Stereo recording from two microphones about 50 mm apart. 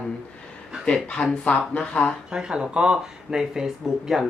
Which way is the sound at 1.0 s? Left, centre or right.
Centre.